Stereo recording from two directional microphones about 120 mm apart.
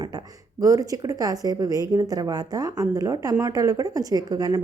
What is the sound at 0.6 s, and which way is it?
A woman's voice, 30° right (ahead or behind).